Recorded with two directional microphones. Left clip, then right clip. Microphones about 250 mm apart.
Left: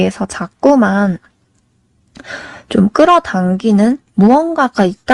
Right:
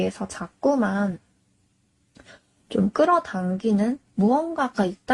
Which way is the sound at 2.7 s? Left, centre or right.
Left.